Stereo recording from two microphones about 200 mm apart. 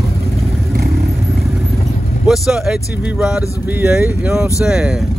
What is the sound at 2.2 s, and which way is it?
Speech, centre (ahead or behind).